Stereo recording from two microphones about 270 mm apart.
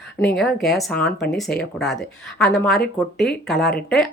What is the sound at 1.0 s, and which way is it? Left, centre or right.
Speech, left.